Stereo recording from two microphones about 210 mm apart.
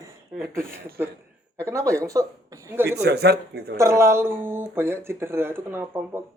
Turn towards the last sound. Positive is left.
turn(degrees=-10)  # may be behind; listen again after turning